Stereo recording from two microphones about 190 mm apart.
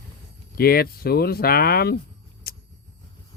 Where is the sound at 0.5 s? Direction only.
55° left (ahead or behind).